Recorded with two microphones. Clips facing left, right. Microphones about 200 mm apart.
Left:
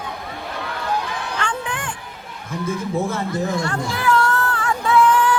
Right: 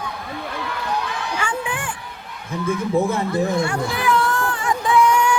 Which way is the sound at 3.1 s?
55° right (ahead or behind).